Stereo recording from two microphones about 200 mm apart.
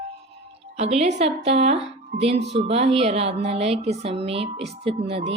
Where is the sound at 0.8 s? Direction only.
35° right (ahead or behind).